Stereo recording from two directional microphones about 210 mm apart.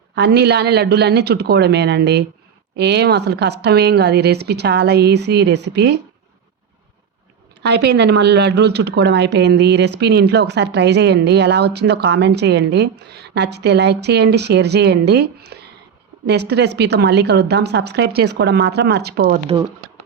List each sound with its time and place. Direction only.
0.2 s a woman's voice: 50° right (ahead or behind)
7.6 s a woman's voice: 55° right (ahead or behind)